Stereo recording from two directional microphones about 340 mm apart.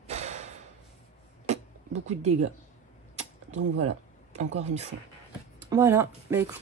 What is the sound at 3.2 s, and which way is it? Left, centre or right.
Mechanisms, centre.